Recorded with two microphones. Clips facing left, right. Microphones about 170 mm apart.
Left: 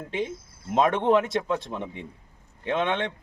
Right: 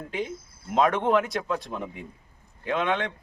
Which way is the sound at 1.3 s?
25° left (ahead or behind).